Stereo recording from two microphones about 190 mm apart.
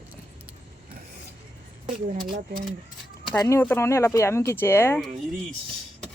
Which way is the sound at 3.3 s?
15° left (ahead or behind).